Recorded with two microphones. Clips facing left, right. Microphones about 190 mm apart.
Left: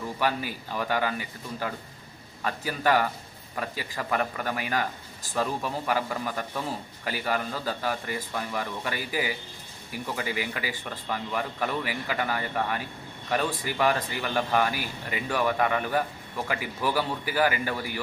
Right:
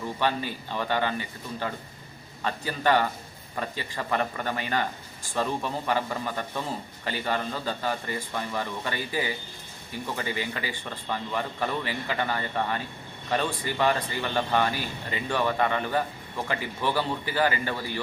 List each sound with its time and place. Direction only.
0.2 s a man's voice: 10° left (ahead or behind)